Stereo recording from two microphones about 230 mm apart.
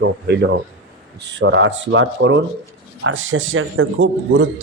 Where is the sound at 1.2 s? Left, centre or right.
Right.